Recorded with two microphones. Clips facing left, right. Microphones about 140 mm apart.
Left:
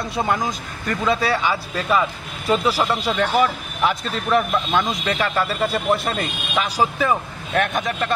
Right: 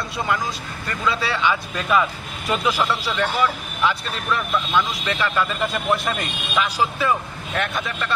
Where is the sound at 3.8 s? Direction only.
45° left (ahead or behind); by 6.7 s 30° left (ahead or behind).